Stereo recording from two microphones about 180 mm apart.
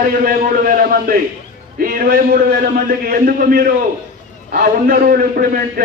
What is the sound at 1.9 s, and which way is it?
A man's voice, 50° right (ahead or behind).